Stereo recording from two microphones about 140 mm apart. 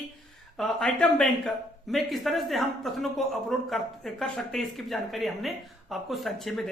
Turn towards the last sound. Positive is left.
turn(degrees=0)  # may be behind; listen again after turning